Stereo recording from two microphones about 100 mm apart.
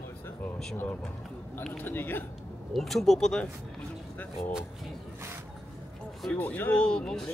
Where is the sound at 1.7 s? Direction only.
20° left (ahead or behind).